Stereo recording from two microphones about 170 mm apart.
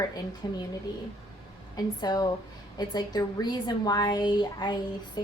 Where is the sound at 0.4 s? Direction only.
25° left (ahead or behind).